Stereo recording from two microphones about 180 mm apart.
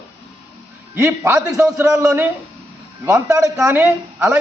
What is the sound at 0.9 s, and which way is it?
A man's voice, 15° right (ahead or behind).